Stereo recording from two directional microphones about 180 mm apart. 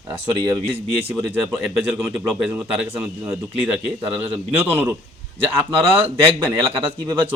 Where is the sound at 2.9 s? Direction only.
10° right (ahead or behind).